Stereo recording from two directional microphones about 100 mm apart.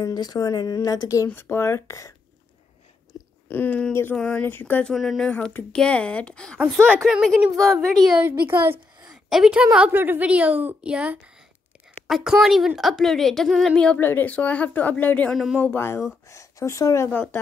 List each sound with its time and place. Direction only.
0.0 s speech: 40° left (ahead or behind)
3.1 s a sound: 40° left (ahead or behind)
3.4 s a woman's voice: 20° left (ahead or behind)
4.8 s a woman's voice: 5° left (ahead or behind)
5.3 s a woman's voice: 15° left (ahead or behind)
7.0 s a woman's voice: 5° right (ahead or behind)
7.5 s a woman's voice: 5° left (ahead or behind)
8.2 s a woman's voice: 20° right (ahead or behind)
9.1 s a woman's voice: 5° right (ahead or behind)
13.9 s a woman's voice: 20° left (ahead or behind)
15.3 s a woman's voice: 5° right (ahead or behind)
15.6 s speech: 25° left (ahead or behind)
17.1 s speech: 20° left (ahead or behind)